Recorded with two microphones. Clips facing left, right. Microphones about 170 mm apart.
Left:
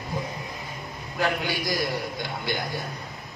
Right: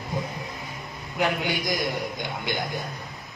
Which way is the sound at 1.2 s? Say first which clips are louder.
Right 1 dB; 20° right (ahead or behind).